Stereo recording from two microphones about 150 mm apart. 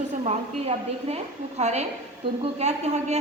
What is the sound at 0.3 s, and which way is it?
A woman's voice, 45° right (ahead or behind).